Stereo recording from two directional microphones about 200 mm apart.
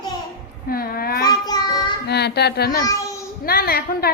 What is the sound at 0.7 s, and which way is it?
Speech, 50° left (ahead or behind).